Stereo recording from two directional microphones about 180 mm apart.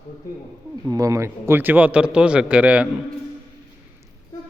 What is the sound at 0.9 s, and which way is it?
A man's voice, 20° right (ahead or behind).